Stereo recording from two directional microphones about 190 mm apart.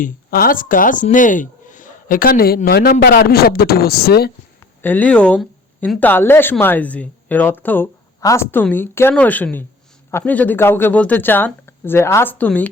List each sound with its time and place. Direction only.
0.0 s speech: 50° left (ahead or behind)
4.8 s speech: 10° left (ahead or behind)